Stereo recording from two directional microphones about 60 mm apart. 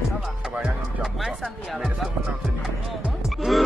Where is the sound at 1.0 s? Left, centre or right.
Centre.